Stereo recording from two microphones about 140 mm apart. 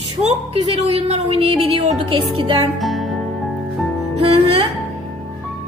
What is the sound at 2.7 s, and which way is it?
Music, centre (ahead or behind).